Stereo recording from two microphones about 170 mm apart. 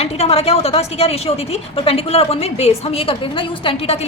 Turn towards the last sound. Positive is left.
turn(degrees=35)  # may be behind; listen again after turning